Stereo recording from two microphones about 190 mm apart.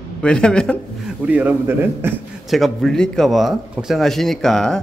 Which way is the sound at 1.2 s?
5° right (ahead or behind).